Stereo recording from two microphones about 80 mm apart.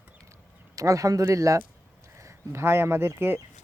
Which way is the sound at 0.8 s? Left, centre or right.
Right.